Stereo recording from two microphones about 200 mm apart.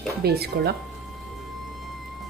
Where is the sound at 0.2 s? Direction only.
55° right (ahead or behind).